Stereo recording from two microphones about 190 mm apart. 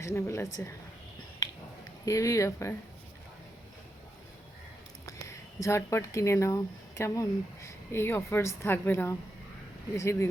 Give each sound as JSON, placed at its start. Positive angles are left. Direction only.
{"t": 0.0, "sound": "speech", "side_deg": 15}
{"t": 2.0, "sound": "speech", "side_deg": 15}
{"t": 5.1, "sound": "speech", "side_deg": 15}